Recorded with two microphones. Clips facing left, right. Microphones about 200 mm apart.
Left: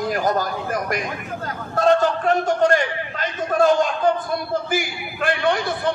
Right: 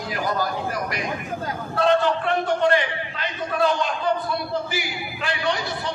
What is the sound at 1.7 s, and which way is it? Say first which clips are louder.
A man's voice: left 2 dB; 45° left (ahead or behind).